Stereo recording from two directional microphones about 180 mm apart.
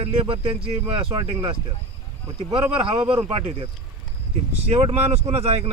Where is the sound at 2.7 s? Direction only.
30° right (ahead or behind).